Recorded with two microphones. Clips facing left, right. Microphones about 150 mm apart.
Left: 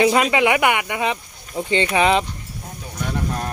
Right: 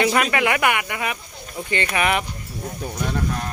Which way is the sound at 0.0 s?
20° left (ahead or behind).